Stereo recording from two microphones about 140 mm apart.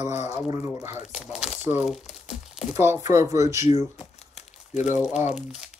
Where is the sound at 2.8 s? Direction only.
20° right (ahead or behind).